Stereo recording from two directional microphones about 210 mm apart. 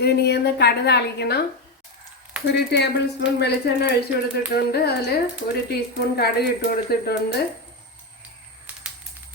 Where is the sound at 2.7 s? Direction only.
55° left (ahead or behind).